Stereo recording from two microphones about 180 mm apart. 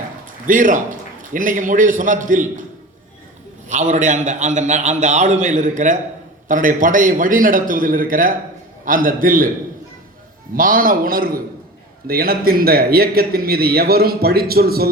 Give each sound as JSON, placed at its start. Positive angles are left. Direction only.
{"t": 0.4, "sound": "a man's voice", "side_deg": -45}
{"t": 3.7, "sound": "a man's voice", "side_deg": -45}
{"t": 10.5, "sound": "a man's voice", "side_deg": -50}